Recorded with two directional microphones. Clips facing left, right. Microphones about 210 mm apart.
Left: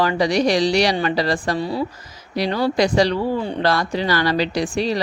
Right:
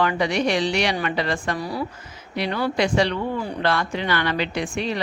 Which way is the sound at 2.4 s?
35° left (ahead or behind).